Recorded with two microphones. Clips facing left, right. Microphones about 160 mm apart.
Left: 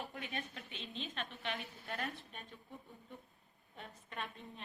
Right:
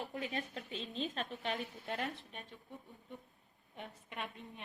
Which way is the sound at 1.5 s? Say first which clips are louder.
Right 4 dB; 20° right (ahead or behind).